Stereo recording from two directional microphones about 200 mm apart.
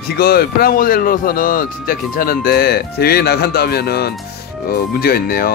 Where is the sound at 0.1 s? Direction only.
50° left (ahead or behind).